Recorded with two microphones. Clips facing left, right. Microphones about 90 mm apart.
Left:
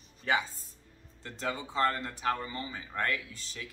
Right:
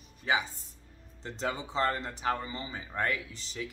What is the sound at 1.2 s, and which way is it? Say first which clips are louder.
Speech: right 1 dB; 20° right (ahead or behind).